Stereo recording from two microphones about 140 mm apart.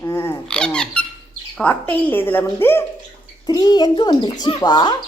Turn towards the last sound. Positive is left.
turn(degrees=30)  # may be behind; listen again after turning